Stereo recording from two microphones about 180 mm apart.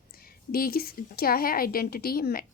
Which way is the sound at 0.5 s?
55° left (ahead or behind).